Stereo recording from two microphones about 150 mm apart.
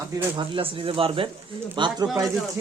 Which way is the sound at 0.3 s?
35° right (ahead or behind).